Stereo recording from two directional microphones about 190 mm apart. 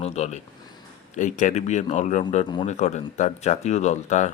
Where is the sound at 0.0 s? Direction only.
35° left (ahead or behind).